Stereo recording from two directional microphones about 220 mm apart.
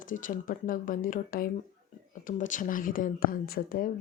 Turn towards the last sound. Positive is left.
turn(degrees=40)  # may be behind; listen again after turning